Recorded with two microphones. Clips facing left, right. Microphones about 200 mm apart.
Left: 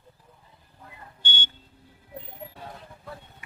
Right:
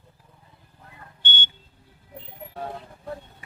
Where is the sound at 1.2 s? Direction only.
60° right (ahead or behind).